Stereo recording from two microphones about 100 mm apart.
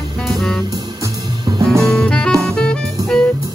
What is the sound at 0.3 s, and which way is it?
Music, 5° left (ahead or behind).